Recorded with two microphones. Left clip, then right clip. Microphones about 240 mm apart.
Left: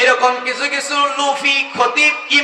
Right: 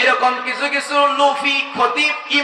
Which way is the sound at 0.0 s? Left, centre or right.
Left.